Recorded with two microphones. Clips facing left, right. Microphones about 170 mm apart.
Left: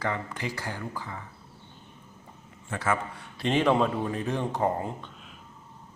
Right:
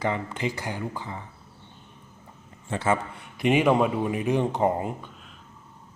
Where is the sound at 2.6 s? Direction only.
25° right (ahead or behind).